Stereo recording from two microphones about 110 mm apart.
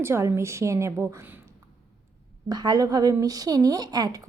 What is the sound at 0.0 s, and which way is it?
A woman's voice, 25° right (ahead or behind).